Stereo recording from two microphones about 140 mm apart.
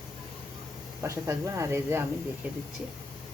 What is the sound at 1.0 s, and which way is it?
Speech, 20° right (ahead or behind).